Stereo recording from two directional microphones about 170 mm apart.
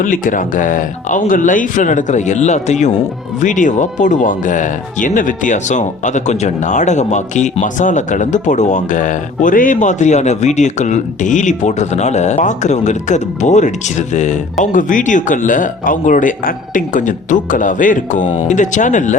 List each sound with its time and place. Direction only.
0.0 s speech: 50° left (ahead or behind)